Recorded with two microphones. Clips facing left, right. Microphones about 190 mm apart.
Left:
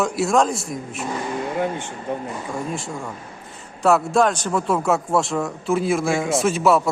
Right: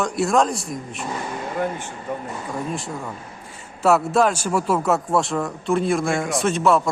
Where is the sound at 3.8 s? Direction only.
5° right (ahead or behind).